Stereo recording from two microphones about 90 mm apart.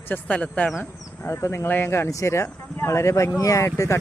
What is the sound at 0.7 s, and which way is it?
Speech, 30° left (ahead or behind).